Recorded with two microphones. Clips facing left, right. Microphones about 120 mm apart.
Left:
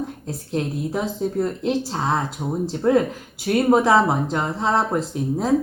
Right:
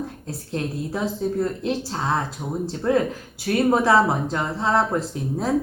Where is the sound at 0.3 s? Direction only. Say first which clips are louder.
Left 3 dB; 20° left (ahead or behind).